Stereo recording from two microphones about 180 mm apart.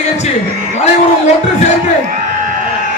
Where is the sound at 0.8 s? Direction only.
40° left (ahead or behind).